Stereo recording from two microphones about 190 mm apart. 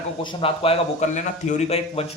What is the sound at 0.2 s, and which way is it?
Speech, 25° left (ahead or behind).